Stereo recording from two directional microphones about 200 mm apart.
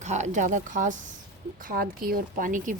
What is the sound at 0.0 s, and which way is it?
Speech, 35° right (ahead or behind).